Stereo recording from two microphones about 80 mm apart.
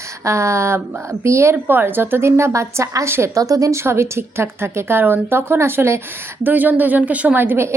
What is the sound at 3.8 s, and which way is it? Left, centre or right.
A woman's voice, right.